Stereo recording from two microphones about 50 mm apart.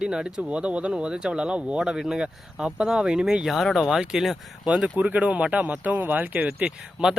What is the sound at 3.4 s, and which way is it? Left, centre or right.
Speech, centre.